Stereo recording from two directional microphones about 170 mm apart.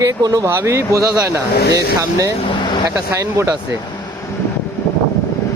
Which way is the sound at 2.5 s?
30° left (ahead or behind).